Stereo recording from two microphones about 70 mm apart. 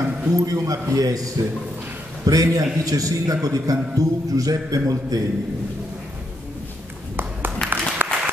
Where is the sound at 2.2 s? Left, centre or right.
Right.